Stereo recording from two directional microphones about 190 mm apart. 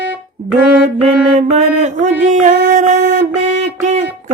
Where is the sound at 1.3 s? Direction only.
40° right (ahead or behind).